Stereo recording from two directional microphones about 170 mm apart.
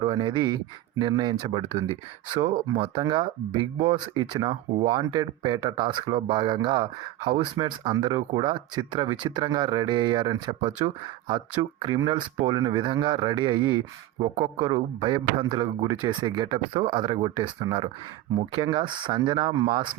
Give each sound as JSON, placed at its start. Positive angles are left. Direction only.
{"t": 0.0, "sound": "speech", "side_deg": -30}
{"t": 11.9, "sound": "speech", "side_deg": -25}